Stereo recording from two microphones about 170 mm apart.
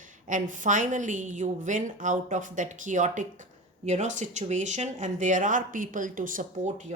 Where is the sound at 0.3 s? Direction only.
50° right (ahead or behind).